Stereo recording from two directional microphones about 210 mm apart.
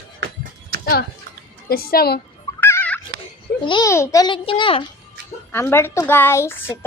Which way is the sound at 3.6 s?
20° left (ahead or behind).